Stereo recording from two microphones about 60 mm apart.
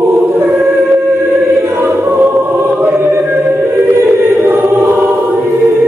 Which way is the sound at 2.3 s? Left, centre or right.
Right.